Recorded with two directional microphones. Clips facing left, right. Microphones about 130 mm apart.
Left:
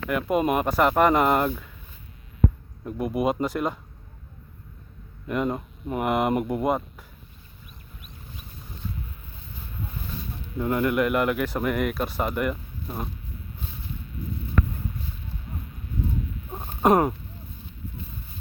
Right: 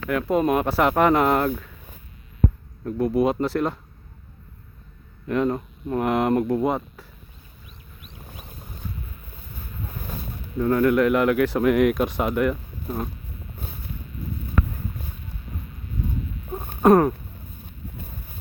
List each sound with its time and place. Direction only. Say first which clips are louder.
0.1 s speech: right 2 dB; 5° left (ahead or behind)
2.8 s speech: right 4 dB; 10° left (ahead or behind)
5.3 s speech: right 4 dB; 5° left (ahead or behind)
10.6 s speech: right 4 dB; 10° left (ahead or behind)
16.8 s a sound: right 4 dB; 20° left (ahead or behind)